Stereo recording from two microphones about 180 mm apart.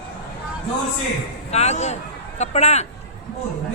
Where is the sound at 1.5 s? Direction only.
35° left (ahead or behind).